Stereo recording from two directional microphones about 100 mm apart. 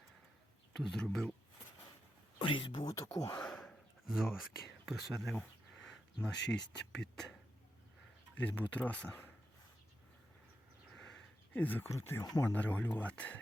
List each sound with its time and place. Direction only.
0.8 s speech: 5° left (ahead or behind)
2.4 s speech: 60° left (ahead or behind)
2.8 s speech: 35° left (ahead or behind)
3.4 s a sound: 5° left (ahead or behind)
4.9 s speech: centre (ahead or behind)
8.4 s speech: 15° left (ahead or behind)
10.9 s a sound: 5° left (ahead or behind)
11.9 s speech: 25° left (ahead or behind)